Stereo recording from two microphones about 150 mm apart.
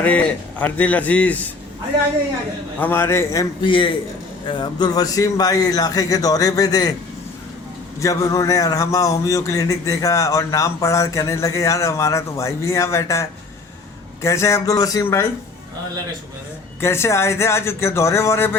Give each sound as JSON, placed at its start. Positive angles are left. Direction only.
{"t": 0.0, "sound": "speech", "side_deg": 10}
{"t": 2.8, "sound": "speech", "side_deg": 15}
{"t": 3.6, "sound": "a man's voice", "side_deg": 35}
{"t": 8.0, "sound": "a man's voice", "side_deg": 25}
{"t": 16.8, "sound": "speech", "side_deg": 20}